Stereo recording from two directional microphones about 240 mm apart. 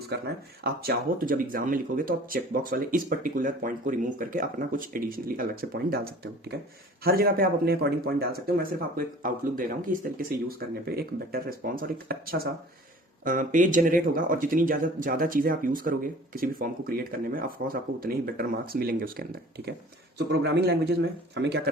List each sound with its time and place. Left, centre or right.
0.1 s speech: right
7.0 s speech: right